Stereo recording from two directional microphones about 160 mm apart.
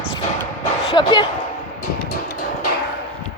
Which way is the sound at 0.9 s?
30° left (ahead or behind).